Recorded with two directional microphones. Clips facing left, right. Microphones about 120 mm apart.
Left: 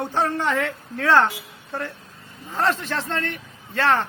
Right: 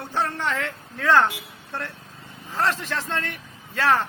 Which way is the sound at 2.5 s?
Centre (ahead or behind).